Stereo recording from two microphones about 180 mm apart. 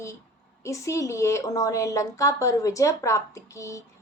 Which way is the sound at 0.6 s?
15° left (ahead or behind).